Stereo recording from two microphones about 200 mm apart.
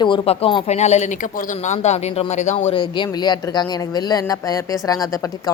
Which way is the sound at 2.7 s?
20° left (ahead or behind).